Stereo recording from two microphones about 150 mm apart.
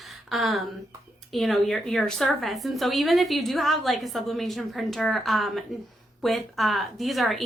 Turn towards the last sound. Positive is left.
turn(degrees=0)  # may be behind; listen again after turning